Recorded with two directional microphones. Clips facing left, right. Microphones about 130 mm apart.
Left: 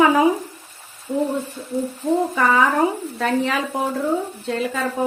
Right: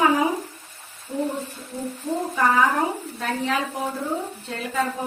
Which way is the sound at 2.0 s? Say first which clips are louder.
Left 7 dB; 55° left (ahead or behind).